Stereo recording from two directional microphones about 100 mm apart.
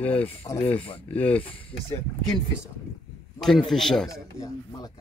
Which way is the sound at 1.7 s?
60° left (ahead or behind).